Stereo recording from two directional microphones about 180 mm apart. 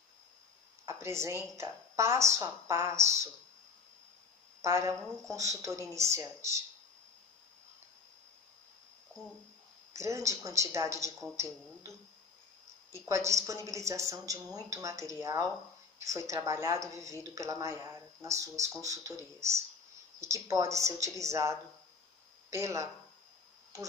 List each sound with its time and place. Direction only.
0.8 s a sound: 15° right (ahead or behind)
1.6 s speech: 15° right (ahead or behind)
4.6 s a woman's voice: 15° right (ahead or behind)
9.9 s speech: 15° right (ahead or behind)
12.9 s speech: 15° right (ahead or behind)